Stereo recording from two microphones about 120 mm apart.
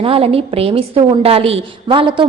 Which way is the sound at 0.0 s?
55° right (ahead or behind).